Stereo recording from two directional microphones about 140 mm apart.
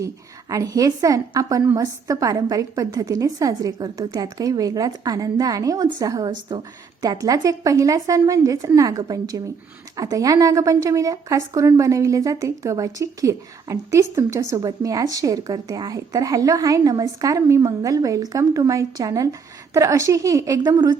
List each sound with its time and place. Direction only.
0.5 s a woman's voice: 25° right (ahead or behind)